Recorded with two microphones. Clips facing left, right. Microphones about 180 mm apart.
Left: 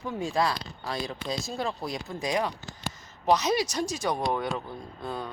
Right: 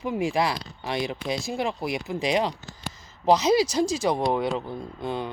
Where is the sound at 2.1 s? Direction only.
25° right (ahead or behind).